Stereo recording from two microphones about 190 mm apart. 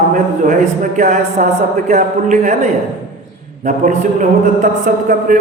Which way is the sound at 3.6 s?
40° right (ahead or behind).